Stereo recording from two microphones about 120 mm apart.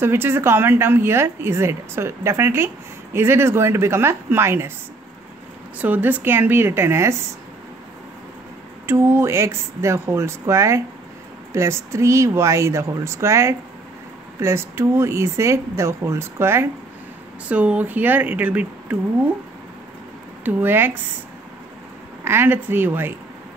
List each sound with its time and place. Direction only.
0.0 s a woman's voice: 20° right (ahead or behind)
5.8 s a woman's voice: 15° right (ahead or behind)
8.8 s a woman's voice: 20° right (ahead or behind)
20.4 s speech: 15° right (ahead or behind)
22.2 s a woman's voice: 20° right (ahead or behind)